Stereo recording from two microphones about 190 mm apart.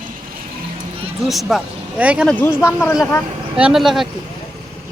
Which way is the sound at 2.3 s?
10° left (ahead or behind).